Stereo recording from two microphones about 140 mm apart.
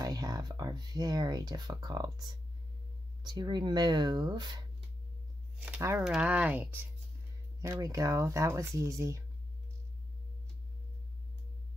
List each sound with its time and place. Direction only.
0.0 s speech: 25° right (ahead or behind)
3.3 s speech: 30° right (ahead or behind)
5.8 s speech: 20° right (ahead or behind)
6.0 s speech: 5° right (ahead or behind)